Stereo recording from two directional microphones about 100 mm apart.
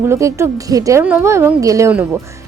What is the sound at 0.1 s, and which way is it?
A woman's voice, 30° right (ahead or behind).